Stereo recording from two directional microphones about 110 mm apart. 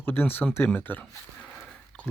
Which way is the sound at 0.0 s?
20° left (ahead or behind).